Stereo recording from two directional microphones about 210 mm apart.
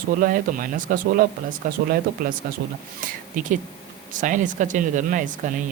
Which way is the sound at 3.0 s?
40° right (ahead or behind).